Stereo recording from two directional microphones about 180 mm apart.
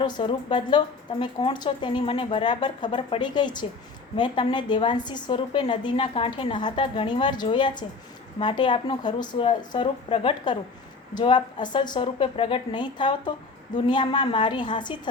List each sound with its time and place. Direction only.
0.0 s a woman's voice: 25° left (ahead or behind)